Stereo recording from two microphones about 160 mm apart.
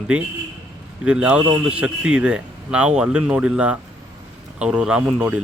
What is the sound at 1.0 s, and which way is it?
A man's voice, 5° right (ahead or behind).